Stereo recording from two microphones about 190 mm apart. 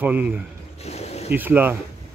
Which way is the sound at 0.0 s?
10° right (ahead or behind).